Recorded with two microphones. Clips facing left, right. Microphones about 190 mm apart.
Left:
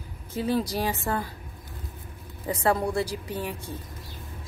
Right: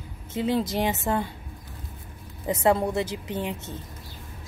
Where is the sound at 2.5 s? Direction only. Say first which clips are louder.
Right 3 dB; 25° right (ahead or behind).